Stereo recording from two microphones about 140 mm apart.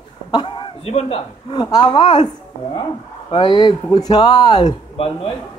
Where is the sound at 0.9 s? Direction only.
45° left (ahead or behind).